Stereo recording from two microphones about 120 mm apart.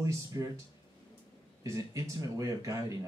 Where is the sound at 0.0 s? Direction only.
30° right (ahead or behind).